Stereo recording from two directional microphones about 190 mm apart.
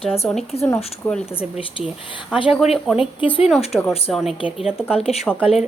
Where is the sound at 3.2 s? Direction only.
25° left (ahead or behind).